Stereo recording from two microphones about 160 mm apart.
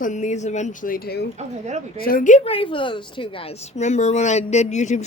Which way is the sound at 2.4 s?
35° left (ahead or behind).